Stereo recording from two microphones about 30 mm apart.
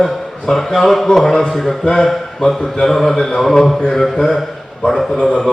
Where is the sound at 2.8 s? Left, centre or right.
Centre.